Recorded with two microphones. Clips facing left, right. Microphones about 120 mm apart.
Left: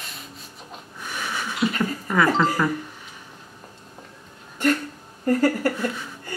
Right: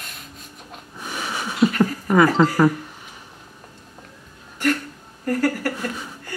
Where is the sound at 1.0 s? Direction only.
15° right (ahead or behind).